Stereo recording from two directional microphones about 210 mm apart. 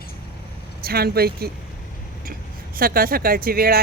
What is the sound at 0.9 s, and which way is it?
Speech, 45° right (ahead or behind).